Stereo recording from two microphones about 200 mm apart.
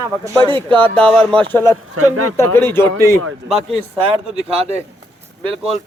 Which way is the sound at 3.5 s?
30° right (ahead or behind).